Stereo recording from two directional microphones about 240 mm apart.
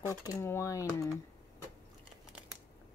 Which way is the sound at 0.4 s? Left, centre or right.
Centre.